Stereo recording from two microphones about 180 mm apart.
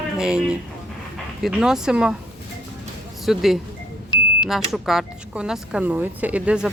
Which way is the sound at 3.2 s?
Centre (ahead or behind).